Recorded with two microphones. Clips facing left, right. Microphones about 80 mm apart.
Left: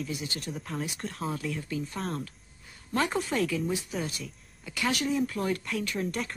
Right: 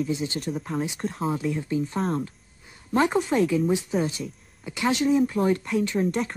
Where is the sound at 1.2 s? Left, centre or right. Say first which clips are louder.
Right 6 dB; right.